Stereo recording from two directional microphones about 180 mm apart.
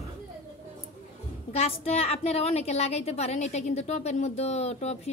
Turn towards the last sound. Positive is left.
turn(degrees=35)  # may be behind; listen again after turning